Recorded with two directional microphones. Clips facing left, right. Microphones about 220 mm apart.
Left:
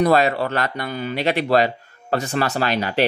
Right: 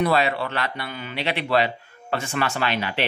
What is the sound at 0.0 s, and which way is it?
Speech, 45° left (ahead or behind).